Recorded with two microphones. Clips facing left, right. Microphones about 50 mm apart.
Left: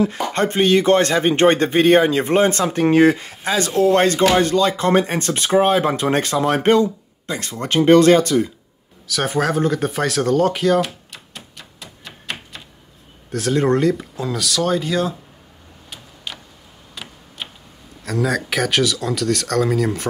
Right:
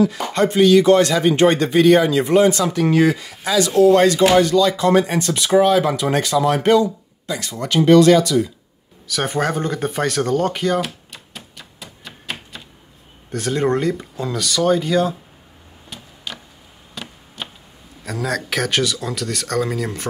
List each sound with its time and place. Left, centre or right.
0.3 s speech: left
9.0 s speech: centre
13.3 s speech: centre
16.3 s a sound: centre
16.9 s tick-tock: centre
18.0 s speech: centre